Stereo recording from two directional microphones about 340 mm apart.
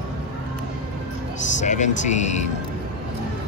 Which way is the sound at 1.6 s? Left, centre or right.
Left.